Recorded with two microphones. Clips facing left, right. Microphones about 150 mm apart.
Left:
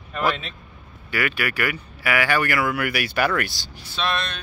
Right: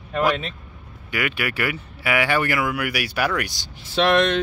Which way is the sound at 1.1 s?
20° right (ahead or behind).